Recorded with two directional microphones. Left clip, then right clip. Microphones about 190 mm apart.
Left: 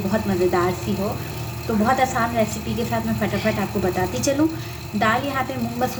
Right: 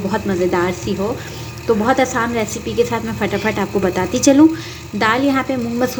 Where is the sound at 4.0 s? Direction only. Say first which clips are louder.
Right 10 dB; 35° right (ahead or behind).